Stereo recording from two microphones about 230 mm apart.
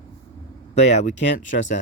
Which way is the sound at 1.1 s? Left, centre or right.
Left.